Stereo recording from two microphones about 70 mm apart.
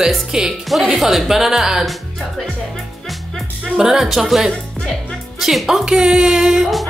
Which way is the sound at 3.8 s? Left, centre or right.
Centre.